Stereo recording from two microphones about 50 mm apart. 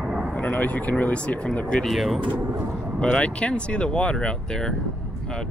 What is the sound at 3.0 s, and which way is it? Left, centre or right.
Speech, left.